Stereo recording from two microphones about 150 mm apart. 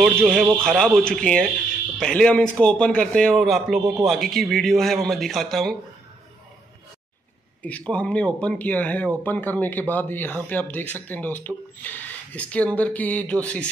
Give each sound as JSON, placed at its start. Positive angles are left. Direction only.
{"t": 0.0, "sound": "speech", "side_deg": 0}
{"t": 7.6, "sound": "speech", "side_deg": 10}